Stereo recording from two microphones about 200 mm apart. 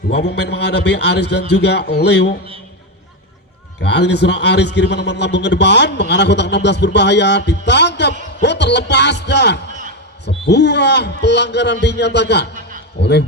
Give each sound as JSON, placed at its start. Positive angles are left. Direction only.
{"t": 0.1, "sound": "a man's voice", "side_deg": 60}
{"t": 3.8, "sound": "a man's voice", "side_deg": 60}